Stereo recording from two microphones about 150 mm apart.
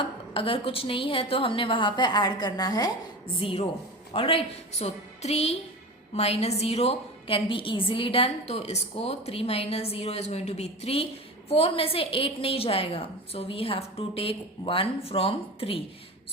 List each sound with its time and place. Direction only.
0.3 s a woman's voice: 35° left (ahead or behind)
3.3 s a woman's voice: 40° left (ahead or behind)